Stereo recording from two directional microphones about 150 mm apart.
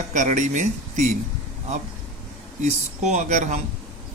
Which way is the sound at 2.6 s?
50° right (ahead or behind).